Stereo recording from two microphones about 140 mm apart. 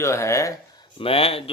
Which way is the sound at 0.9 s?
40° left (ahead or behind).